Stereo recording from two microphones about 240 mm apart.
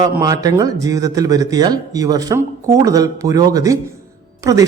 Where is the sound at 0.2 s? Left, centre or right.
Centre.